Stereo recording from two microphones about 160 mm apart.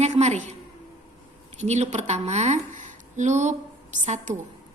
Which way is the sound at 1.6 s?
45° right (ahead or behind).